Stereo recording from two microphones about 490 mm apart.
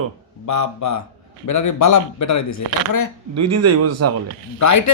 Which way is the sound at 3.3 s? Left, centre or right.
Right.